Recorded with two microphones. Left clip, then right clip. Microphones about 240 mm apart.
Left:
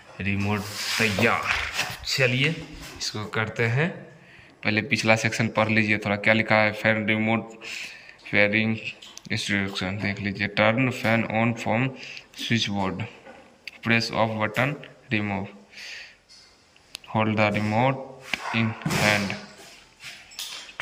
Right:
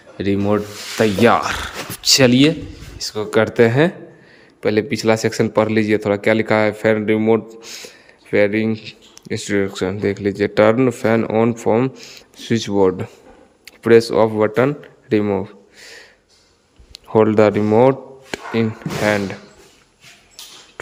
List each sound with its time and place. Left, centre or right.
0.2 s speech: right
4.6 s speech: centre
16.9 s speech: right